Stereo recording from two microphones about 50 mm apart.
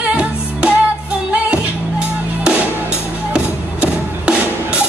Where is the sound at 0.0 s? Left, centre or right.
Right.